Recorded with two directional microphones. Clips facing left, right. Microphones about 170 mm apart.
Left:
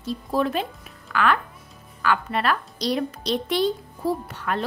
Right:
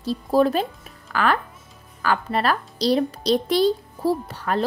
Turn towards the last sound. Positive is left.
turn(degrees=-35)  # may be behind; listen again after turning